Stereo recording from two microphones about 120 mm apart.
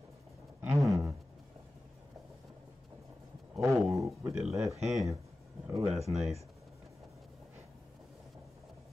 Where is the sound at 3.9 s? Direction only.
25° right (ahead or behind).